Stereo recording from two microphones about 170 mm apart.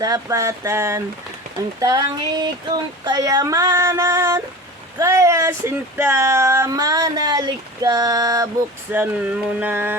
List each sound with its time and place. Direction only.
0.0 s speech: 20° right (ahead or behind)
8.9 s speech: 10° right (ahead or behind)